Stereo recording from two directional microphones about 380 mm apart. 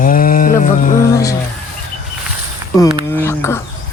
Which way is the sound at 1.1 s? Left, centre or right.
Centre.